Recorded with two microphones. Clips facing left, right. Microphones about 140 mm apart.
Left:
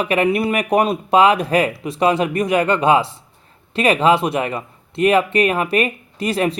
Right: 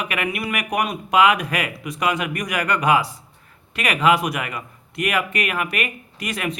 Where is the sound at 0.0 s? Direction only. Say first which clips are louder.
Left 9 dB; 30° left (ahead or behind).